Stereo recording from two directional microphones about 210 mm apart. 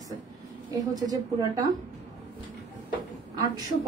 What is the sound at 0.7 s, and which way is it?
A man's voice, 20° right (ahead or behind).